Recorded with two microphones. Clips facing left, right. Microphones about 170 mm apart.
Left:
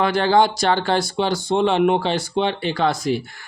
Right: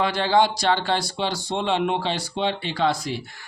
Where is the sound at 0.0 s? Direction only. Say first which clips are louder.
Left 3 dB; 50° left (ahead or behind).